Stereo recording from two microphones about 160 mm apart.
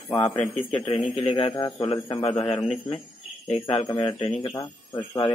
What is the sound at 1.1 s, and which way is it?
Speech, 35° left (ahead or behind).